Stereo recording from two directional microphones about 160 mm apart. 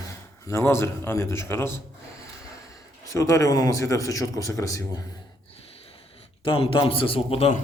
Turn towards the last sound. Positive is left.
turn(degrees=40)  # may be behind; listen again after turning